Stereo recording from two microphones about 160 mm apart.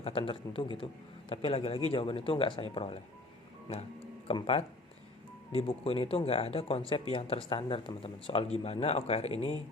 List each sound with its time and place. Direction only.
0.0 s speech: 35° left (ahead or behind)
4.3 s speech: 35° left (ahead or behind)